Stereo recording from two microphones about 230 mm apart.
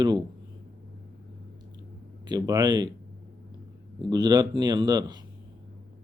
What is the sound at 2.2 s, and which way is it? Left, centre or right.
Speech, centre.